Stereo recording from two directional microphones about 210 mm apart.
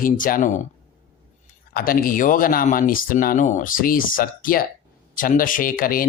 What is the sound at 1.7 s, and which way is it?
Speech, 45° left (ahead or behind).